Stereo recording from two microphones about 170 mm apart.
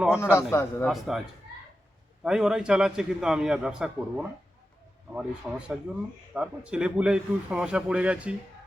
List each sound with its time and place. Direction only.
0.2 s a man's voice: 15° left (ahead or behind)
0.9 s a man's voice: centre (ahead or behind)
2.2 s a man's voice: 5° right (ahead or behind)